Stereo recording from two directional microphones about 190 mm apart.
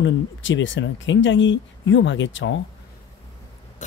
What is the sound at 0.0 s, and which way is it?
Speech, 80° left.